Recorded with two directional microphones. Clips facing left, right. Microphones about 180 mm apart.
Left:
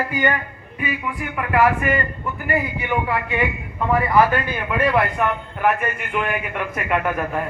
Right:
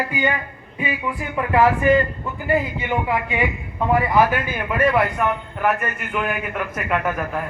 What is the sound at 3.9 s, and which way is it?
A man's voice, 5° right (ahead or behind).